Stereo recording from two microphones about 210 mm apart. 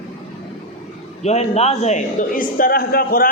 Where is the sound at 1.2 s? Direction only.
30° left (ahead or behind).